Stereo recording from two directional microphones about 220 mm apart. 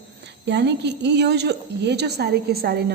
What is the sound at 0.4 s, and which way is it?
A woman's voice, 50° right (ahead or behind).